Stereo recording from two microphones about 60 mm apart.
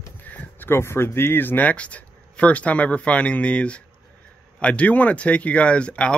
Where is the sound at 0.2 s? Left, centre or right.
Left.